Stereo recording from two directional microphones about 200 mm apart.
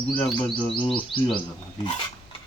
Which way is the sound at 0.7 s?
25° left (ahead or behind).